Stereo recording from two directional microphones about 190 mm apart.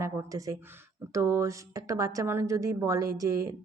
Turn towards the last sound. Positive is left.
turn(degrees=-15)  # may be behind; listen again after turning